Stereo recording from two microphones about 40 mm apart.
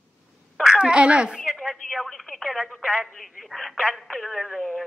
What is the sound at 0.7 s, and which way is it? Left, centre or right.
Speech, right.